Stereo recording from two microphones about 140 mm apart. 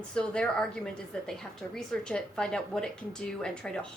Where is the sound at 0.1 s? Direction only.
5° left (ahead or behind).